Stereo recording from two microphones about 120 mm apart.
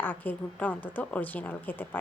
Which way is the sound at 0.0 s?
15° left (ahead or behind).